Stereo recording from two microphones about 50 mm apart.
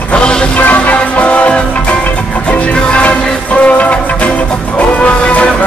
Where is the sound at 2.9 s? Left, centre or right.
Left.